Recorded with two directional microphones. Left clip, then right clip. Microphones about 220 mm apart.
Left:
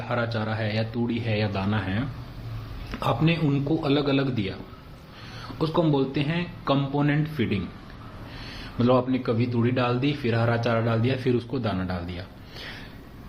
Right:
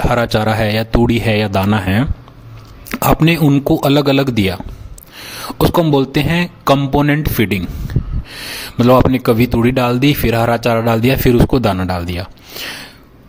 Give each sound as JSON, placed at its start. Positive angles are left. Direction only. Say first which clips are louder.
{"t": 0.0, "sound": "speech", "louder": "right 14 dB", "side_deg": -50}
{"t": 5.5, "sound": "speech", "louder": "right 11 dB", "side_deg": -50}